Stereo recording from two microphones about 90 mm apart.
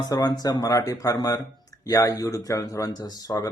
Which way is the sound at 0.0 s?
50° left (ahead or behind).